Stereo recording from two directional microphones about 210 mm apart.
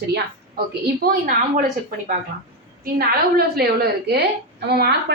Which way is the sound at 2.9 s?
50° right (ahead or behind).